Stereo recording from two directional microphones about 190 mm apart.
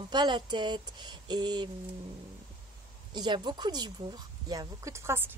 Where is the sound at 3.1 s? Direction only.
20° right (ahead or behind).